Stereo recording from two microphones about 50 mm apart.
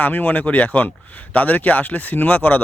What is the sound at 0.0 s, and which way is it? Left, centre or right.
Speech, left.